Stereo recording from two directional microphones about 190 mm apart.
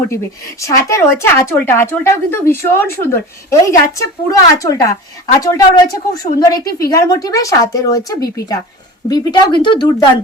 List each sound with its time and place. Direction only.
0.1 s speech: 15° left (ahead or behind)